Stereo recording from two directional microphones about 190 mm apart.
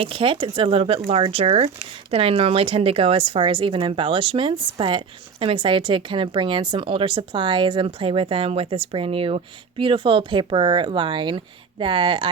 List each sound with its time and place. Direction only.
0.0 s a woman's voice: 25° right (ahead or behind)